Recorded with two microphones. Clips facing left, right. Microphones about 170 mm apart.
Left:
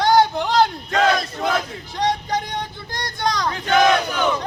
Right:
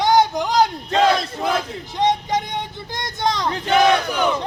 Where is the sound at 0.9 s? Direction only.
25° right (ahead or behind).